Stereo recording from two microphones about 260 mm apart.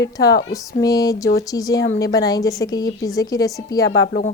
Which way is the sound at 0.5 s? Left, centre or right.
Centre.